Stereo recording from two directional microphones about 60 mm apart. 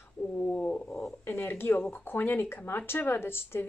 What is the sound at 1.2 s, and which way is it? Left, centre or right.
Speech, left.